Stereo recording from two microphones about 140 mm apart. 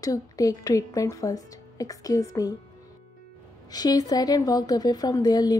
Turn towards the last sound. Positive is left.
turn(degrees=30)  # may be behind; listen again after turning